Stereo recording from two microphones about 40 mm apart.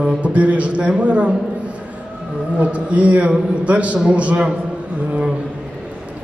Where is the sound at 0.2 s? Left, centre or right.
Right.